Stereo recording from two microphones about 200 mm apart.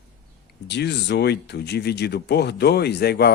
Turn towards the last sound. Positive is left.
turn(degrees=55)  # may be behind; listen again after turning